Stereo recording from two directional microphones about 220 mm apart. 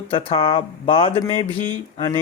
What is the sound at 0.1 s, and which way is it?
Speech, 25° left (ahead or behind).